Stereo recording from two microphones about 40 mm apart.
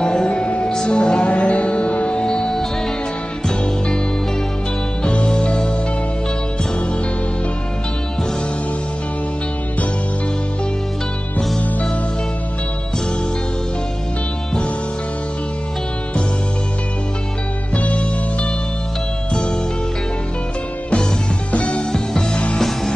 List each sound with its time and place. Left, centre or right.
0.0 s music: centre
5.0 s music: left
17.7 s music: left
21.5 s music: left
21.9 s music: centre